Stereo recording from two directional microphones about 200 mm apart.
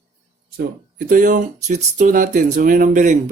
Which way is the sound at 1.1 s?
40° right (ahead or behind).